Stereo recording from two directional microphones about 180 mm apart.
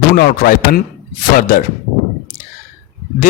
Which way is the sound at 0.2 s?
55° left (ahead or behind).